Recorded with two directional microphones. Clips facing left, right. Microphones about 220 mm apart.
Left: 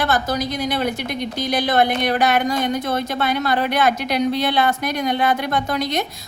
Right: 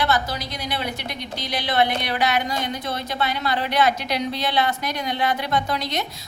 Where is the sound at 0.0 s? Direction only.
50° left (ahead or behind).